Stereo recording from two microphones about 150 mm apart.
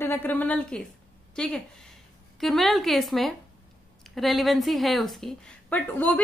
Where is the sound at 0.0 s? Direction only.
15° left (ahead or behind).